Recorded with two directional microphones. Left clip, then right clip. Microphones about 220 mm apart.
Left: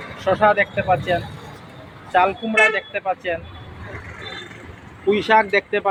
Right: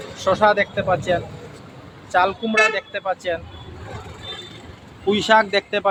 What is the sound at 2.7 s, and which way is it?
Speech, 10° right (ahead or behind).